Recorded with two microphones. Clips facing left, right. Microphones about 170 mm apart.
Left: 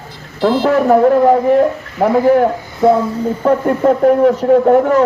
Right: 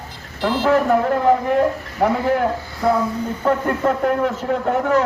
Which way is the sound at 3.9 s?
40° left (ahead or behind).